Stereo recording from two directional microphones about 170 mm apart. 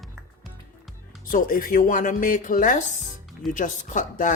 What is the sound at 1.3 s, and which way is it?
A woman's voice, 55° left (ahead or behind).